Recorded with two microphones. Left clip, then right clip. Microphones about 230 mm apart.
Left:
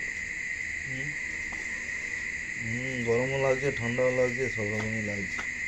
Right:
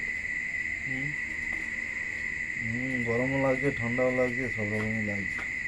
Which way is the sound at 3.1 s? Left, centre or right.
Left.